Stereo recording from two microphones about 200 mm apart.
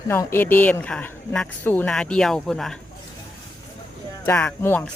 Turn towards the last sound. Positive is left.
turn(degrees=10)  # may be behind; listen again after turning